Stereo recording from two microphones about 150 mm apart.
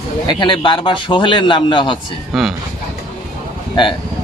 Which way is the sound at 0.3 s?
30° left (ahead or behind).